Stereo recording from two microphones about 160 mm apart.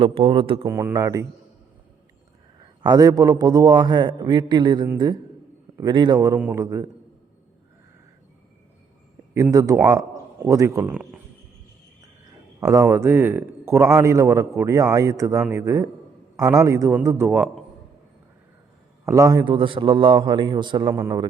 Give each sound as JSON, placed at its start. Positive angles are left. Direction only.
{"t": 0.0, "sound": "speech", "side_deg": -40}
{"t": 0.6, "sound": "a man's voice", "side_deg": -15}
{"t": 2.6, "sound": "a man's voice", "side_deg": -25}
{"t": 6.3, "sound": "a man's voice", "side_deg": -10}
{"t": 9.3, "sound": "a man's voice", "side_deg": -20}
{"t": 12.5, "sound": "a man's voice", "side_deg": -20}
{"t": 19.0, "sound": "a man's voice", "side_deg": -20}
{"t": 20.9, "sound": "a man's voice", "side_deg": -15}